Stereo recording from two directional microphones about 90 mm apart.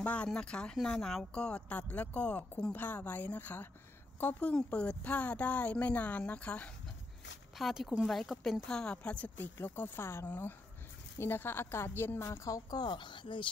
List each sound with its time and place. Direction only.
0.0 s a woman's voice: 15° left (ahead or behind)
7.5 s a woman's voice: centre (ahead or behind); by 12.3 s 25° left (ahead or behind)
12.3 s a woman's voice: 40° left (ahead or behind); by 13.5 s 65° left (ahead or behind)